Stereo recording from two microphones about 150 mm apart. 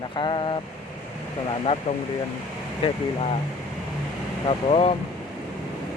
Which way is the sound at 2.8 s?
45° left (ahead or behind).